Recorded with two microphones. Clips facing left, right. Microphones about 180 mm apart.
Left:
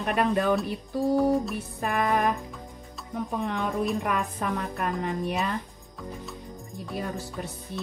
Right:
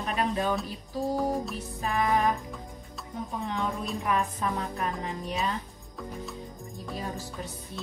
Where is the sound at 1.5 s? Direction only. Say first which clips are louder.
Left 2 dB; 60° left (ahead or behind).